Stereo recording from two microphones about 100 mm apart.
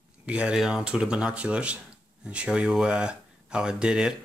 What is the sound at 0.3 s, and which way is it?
Speech, 10° right (ahead or behind).